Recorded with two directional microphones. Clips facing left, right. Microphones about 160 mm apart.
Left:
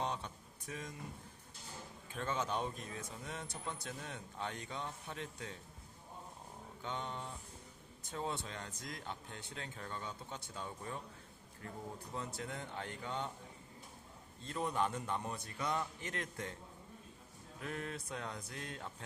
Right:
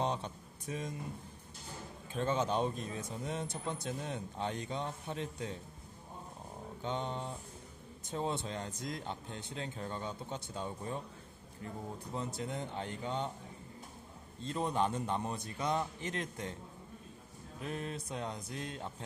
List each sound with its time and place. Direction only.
0.0 s a sound: 25° right (ahead or behind)
0.7 s speech: 25° right (ahead or behind)
2.1 s speech: 25° right (ahead or behind)
6.8 s speech: 25° right (ahead or behind)
14.4 s speech: 25° right (ahead or behind)
17.6 s speech: 25° right (ahead or behind)